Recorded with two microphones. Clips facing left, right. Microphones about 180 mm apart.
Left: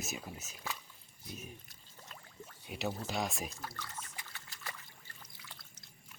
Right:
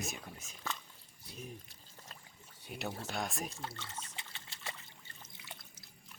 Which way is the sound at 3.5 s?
25° right (ahead or behind).